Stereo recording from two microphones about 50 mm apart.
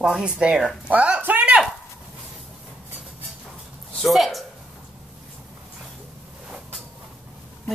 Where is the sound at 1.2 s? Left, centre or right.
Right.